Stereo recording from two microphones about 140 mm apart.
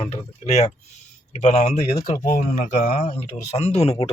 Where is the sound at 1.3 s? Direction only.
50° left (ahead or behind).